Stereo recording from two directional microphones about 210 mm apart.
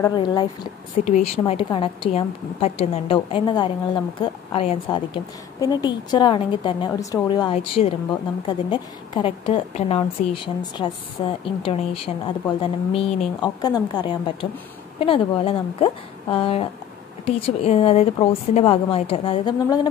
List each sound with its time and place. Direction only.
0.0 s a woman's voice: 20° left (ahead or behind)
1.0 s a woman's voice: 35° left (ahead or behind)